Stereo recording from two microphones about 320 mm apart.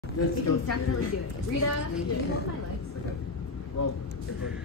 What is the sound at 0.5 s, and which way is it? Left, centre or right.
Speech, left.